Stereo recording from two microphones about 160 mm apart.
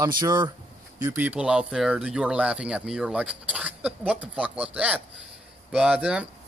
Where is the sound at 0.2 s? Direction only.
25° right (ahead or behind).